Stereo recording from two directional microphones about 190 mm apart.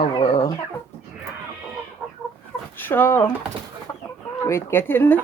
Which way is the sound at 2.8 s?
10° left (ahead or behind).